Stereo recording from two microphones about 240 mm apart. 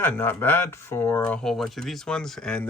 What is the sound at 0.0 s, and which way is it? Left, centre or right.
Speech, centre.